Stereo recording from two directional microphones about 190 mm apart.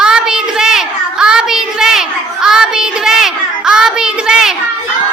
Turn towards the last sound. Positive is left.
turn(degrees=-5)  # may be behind; listen again after turning